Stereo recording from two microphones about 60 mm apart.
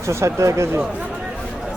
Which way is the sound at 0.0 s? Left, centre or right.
Right.